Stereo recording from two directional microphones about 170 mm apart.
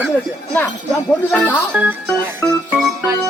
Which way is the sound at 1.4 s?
10° left (ahead or behind).